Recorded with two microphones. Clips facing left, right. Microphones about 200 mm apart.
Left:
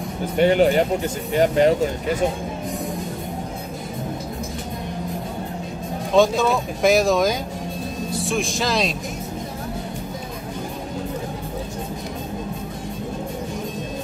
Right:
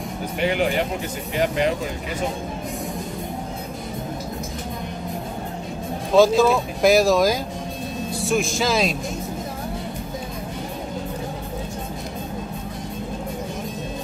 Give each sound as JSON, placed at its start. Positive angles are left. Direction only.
{"t": 0.4, "sound": "speech", "side_deg": 40}
{"t": 6.1, "sound": "speech", "side_deg": 0}